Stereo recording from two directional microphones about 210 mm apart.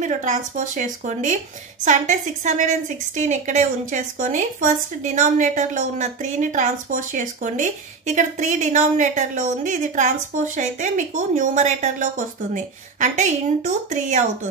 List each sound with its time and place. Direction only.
0.0 s speech: 35° right (ahead or behind)